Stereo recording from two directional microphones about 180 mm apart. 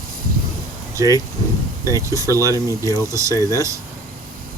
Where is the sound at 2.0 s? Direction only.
15° right (ahead or behind).